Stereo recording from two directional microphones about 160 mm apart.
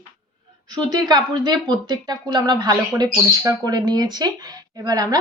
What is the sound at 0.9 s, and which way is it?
Speech, 25° right (ahead or behind).